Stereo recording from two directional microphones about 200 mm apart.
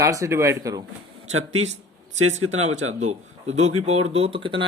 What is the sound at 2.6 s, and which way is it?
Speech, 90° right.